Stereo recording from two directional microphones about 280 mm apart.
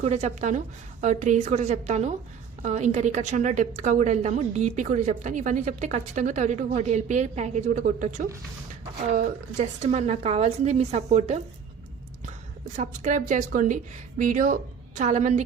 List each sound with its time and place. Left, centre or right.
0.0 s a woman's voice: right
12.6 s a woman's voice: right